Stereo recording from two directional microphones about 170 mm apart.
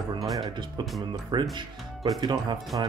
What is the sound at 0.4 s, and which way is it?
Speech, 25° right (ahead or behind).